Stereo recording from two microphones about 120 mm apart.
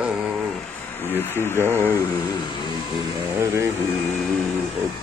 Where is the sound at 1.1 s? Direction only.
20° left (ahead or behind).